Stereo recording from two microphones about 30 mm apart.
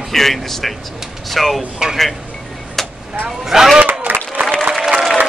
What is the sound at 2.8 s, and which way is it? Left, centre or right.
Vehicle, centre.